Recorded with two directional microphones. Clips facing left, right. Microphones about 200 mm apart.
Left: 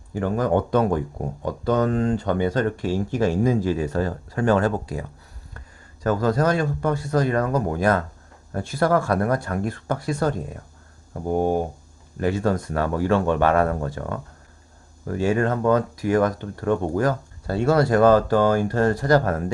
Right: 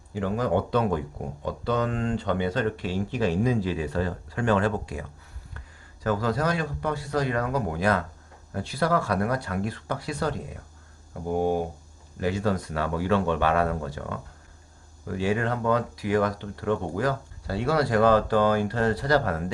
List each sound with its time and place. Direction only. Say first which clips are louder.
0.1 s speech: left 4 dB; 45° left (ahead or behind)